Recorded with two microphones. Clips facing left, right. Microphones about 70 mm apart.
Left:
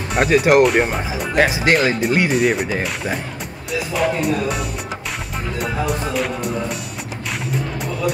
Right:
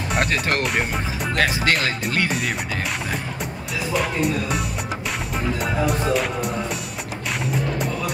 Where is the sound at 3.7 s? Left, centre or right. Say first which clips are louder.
Left 4 dB; centre.